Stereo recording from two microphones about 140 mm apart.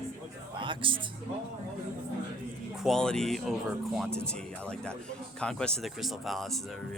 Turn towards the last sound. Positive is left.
turn(degrees=0)  # may be behind; listen again after turning